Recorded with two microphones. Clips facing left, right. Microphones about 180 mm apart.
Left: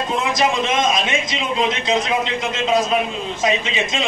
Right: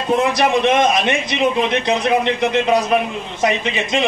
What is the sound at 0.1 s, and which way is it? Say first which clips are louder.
A man's voice: right 6 dB; 60° right (ahead or behind).